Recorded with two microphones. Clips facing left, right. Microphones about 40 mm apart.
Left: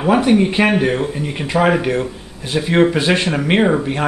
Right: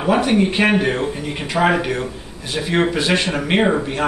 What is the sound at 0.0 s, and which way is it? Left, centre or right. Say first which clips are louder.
Speech: left 3 dB; centre.